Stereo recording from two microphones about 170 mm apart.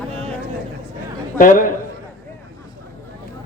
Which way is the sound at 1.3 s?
55° left (ahead or behind).